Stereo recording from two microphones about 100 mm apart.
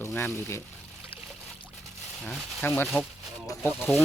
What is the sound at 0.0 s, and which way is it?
Speech, 25° left (ahead or behind).